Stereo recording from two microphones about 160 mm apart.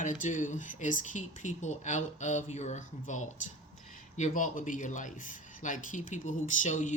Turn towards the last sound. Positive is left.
turn(degrees=50)  # may be behind; listen again after turning